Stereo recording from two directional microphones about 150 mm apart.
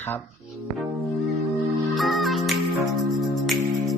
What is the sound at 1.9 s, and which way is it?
Music, centre (ahead or behind).